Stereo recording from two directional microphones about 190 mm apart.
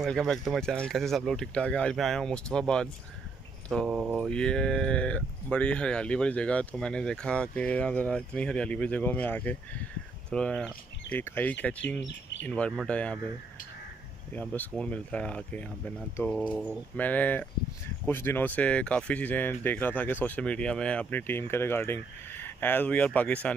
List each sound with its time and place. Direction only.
0.0 s mantra: centre (ahead or behind)
10.3 s speech: 5° left (ahead or behind)
12.0 s speech: 65° left (ahead or behind)
12.4 s speech: 5° left (ahead or behind)
14.3 s speech: 10° left (ahead or behind)